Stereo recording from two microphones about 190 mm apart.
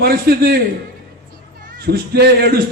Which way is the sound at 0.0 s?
55° right (ahead or behind).